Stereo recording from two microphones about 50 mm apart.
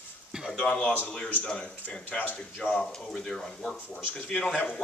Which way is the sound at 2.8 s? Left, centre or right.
Centre.